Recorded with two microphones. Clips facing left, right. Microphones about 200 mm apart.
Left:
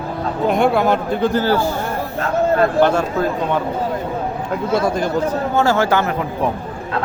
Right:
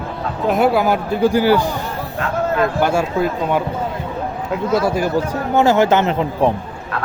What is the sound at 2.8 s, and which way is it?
Speech, 10° right (ahead or behind).